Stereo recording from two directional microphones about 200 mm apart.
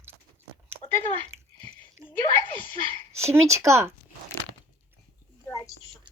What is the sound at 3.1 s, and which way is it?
Speech, 15° right (ahead or behind).